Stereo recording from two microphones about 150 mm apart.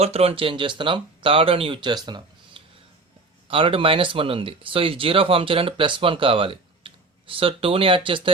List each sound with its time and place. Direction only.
0.0 s speech: 40° right (ahead or behind)